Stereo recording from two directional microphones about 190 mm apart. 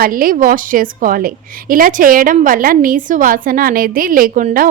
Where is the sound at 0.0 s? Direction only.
50° right (ahead or behind).